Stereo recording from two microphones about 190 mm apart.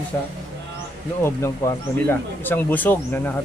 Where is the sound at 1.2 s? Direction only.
15° left (ahead or behind).